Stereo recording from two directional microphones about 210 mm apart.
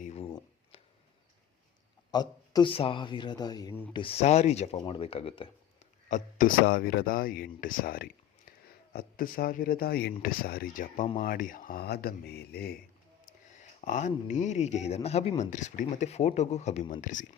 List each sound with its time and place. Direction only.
0.0 s a sound: 30° left (ahead or behind)
2.0 s a man's voice: 20° left (ahead or behind); by 12.7 s 50° left (ahead or behind)
13.2 s speech: 35° left (ahead or behind)